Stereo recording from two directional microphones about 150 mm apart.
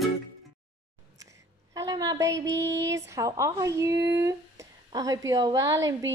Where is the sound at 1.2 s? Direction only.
25° right (ahead or behind).